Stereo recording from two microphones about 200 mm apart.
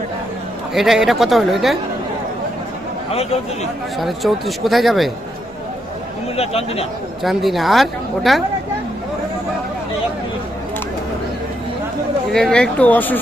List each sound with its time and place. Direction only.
0.7 s speech: centre (ahead or behind)
3.1 s speech: 30° left (ahead or behind)
4.0 s speech: centre (ahead or behind)
6.3 s speech: 30° left (ahead or behind)
7.2 s speech: centre (ahead or behind)
12.3 s speech: 5° left (ahead or behind)